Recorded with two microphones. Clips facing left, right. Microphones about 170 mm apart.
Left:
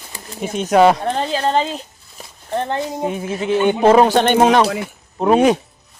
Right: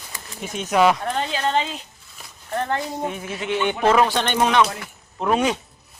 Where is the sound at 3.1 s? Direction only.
35° left (ahead or behind).